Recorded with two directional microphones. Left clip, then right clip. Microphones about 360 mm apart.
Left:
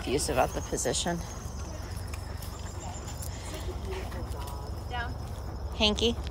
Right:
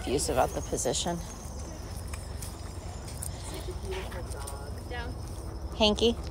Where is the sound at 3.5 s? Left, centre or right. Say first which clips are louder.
Right 1 dB; centre.